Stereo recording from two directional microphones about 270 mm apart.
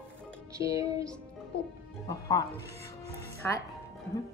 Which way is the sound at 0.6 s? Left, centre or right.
Centre.